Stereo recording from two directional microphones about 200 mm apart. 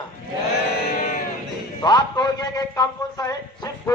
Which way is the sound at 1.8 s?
20° left (ahead or behind).